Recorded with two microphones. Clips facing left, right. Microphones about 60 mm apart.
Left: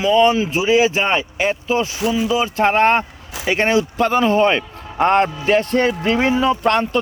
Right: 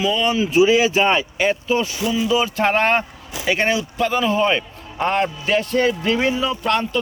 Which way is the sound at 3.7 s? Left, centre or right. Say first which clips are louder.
Left 4 dB; left.